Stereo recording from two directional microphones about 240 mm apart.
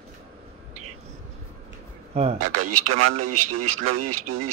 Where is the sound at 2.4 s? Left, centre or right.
Right.